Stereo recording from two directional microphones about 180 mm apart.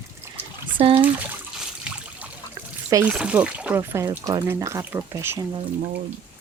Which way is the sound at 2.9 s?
10° right (ahead or behind).